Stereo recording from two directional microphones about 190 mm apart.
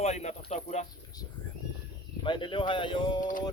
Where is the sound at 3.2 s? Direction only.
45° left (ahead or behind).